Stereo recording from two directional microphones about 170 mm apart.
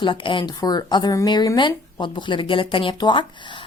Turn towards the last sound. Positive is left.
turn(degrees=30)  # may be behind; listen again after turning